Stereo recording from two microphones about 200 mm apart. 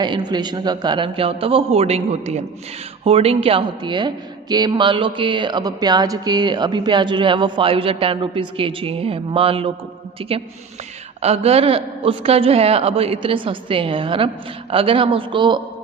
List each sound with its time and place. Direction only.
0.0 s speech: 20° right (ahead or behind)